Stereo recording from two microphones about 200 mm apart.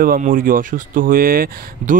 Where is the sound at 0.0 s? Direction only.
45° right (ahead or behind).